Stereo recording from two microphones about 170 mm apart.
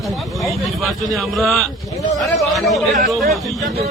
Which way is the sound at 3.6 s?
40° right (ahead or behind).